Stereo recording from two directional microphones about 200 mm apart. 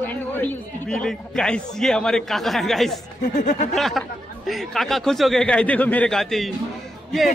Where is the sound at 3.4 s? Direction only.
35° left (ahead or behind).